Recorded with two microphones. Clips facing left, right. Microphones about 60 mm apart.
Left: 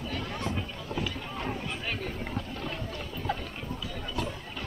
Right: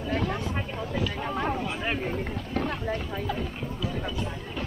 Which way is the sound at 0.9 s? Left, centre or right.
Right.